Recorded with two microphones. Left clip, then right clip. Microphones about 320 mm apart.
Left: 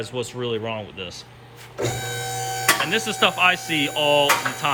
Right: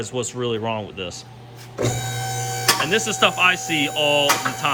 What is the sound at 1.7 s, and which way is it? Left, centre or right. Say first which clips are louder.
Printer: right 1 dB; right.